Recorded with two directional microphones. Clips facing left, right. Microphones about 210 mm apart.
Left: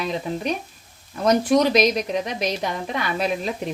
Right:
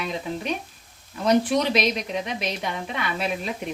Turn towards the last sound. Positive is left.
turn(degrees=40)  # may be behind; listen again after turning